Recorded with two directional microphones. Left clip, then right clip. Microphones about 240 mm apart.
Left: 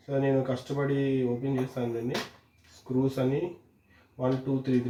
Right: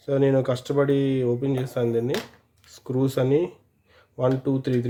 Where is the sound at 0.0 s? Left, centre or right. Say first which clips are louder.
Right 6 dB; right.